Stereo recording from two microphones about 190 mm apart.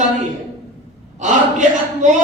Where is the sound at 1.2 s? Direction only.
40° right (ahead or behind).